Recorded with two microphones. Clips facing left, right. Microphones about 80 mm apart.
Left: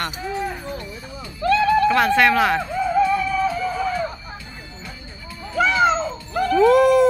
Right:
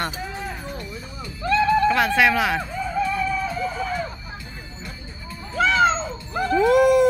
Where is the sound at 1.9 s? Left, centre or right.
Centre.